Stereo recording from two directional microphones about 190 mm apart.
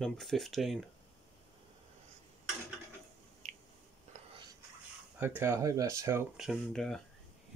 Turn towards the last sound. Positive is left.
turn(degrees=0)  # may be behind; listen again after turning